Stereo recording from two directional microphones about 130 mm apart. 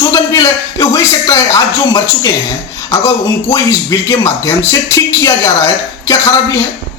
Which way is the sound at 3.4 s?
25° left (ahead or behind).